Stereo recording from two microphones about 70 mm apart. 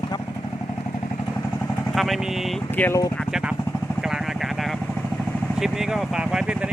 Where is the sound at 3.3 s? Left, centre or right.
Centre.